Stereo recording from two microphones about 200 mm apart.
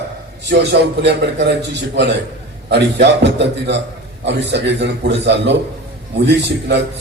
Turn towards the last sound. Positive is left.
turn(degrees=-60)  # may be behind; listen again after turning